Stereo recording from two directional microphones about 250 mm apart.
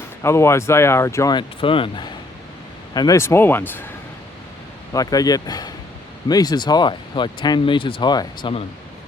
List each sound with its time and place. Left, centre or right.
0.2 s speech: centre
4.9 s speech: centre